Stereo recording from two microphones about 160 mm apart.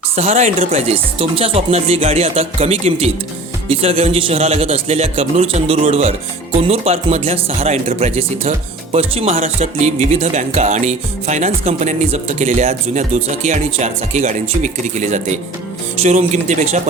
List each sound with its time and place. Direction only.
0.2 s music: 40° right (ahead or behind)
0.7 s speech: 40° right (ahead or behind)
9.6 s music: 45° right (ahead or behind)